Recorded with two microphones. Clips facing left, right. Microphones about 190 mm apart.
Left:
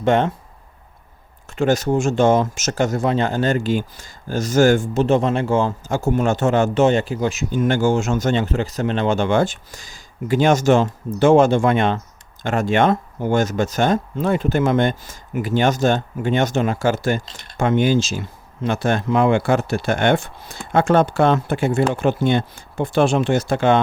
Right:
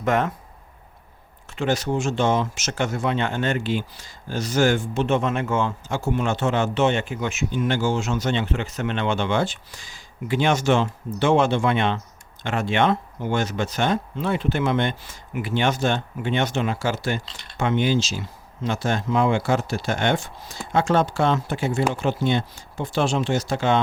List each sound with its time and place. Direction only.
0.0 s speech: 30° left (ahead or behind)
1.5 s speech: 45° left (ahead or behind)